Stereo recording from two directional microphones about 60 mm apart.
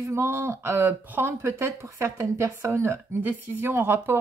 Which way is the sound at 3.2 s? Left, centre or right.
Right.